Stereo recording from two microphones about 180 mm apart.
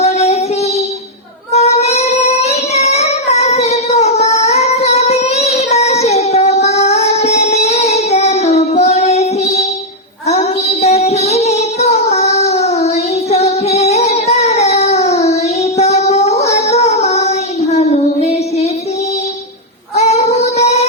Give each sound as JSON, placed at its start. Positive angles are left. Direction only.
{"t": 0.0, "sound": "music", "side_deg": 35}
{"t": 1.5, "sound": "child singing", "side_deg": 35}
{"t": 20.0, "sound": "female singing", "side_deg": 35}